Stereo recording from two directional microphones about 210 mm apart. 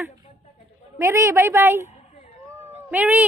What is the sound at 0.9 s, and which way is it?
Speech, 15° right (ahead or behind).